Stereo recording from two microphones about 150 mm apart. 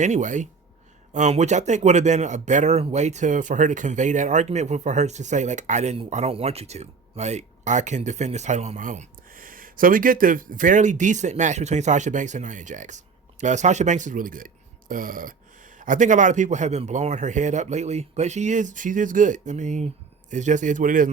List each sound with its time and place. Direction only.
0.0 s a man's voice: 55° right (ahead or behind)